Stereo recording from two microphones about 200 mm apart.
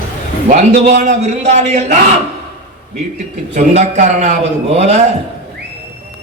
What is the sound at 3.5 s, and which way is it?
A man's voice, 35° right (ahead or behind).